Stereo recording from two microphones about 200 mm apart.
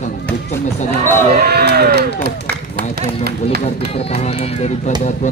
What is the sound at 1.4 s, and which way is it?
Speech, 55° right (ahead or behind).